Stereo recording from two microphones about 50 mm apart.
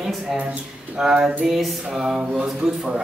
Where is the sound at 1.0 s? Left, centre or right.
Centre.